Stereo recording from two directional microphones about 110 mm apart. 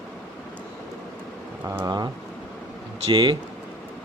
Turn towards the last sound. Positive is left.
turn(degrees=-45)  # may be behind; listen again after turning